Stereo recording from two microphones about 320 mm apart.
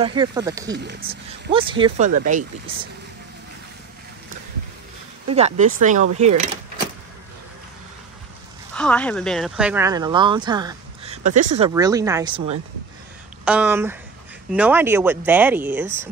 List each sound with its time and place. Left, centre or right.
0.0 s speech: centre
0.7 s speech: right
1.0 s speech: centre
5.3 s speech: centre
8.7 s speech: centre; by 11.7 s right
11.7 s speech: centre
13.5 s speech: centre